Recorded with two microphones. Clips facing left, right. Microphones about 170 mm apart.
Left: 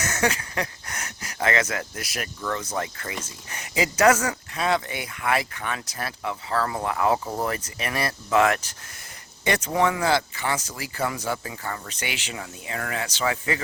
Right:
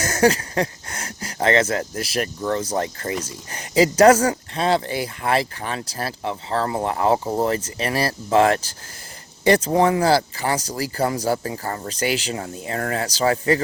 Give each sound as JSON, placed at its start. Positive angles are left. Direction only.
{"t": 0.0, "sound": "speech", "side_deg": -35}